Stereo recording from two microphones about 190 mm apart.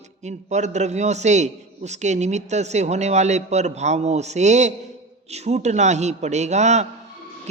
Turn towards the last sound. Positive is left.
turn(degrees=-35)  # may be behind; listen again after turning